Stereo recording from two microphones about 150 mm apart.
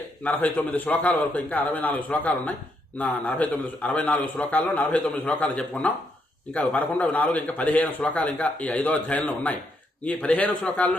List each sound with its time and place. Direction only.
0.3 s a man's voice: 10° left (ahead or behind)